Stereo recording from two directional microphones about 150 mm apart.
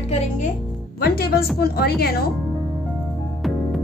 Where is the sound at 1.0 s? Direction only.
90° left.